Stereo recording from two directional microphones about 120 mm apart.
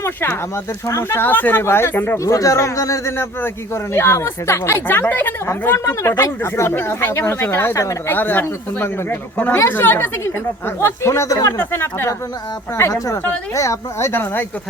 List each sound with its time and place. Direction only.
0.0 s speech: 20° left (ahead or behind)